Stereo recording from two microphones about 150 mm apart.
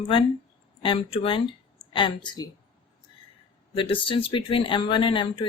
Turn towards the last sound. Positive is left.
turn(degrees=35)  # may be behind; listen again after turning